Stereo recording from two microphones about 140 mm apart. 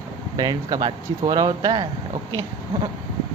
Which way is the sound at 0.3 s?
30° right (ahead or behind).